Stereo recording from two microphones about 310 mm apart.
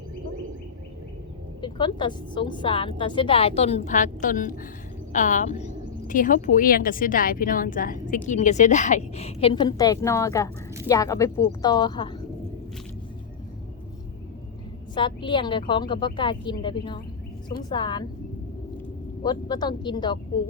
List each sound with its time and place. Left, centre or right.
1.6 s a woman's voice: centre
14.9 s a woman's voice: centre
19.2 s a woman's voice: centre